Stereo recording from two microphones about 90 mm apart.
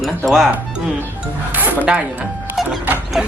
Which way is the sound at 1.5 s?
20° right (ahead or behind).